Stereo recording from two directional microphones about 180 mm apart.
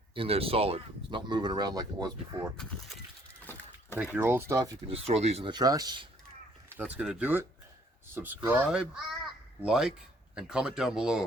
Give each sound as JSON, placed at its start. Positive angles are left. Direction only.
{"t": 0.1, "sound": "speech", "side_deg": -30}
{"t": 3.4, "sound": "a sound", "side_deg": 10}
{"t": 3.9, "sound": "speech", "side_deg": -10}
{"t": 4.9, "sound": "speech", "side_deg": -35}
{"t": 6.7, "sound": "speech", "side_deg": -10}